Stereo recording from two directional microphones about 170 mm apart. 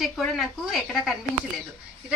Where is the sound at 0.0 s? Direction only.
Centre (ahead or behind).